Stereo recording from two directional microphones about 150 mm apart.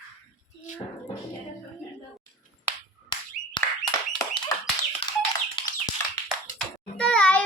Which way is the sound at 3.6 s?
30° left (ahead or behind).